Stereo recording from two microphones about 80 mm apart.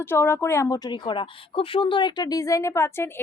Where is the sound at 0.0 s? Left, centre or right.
Left.